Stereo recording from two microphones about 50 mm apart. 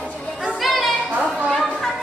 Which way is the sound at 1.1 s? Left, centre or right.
Right.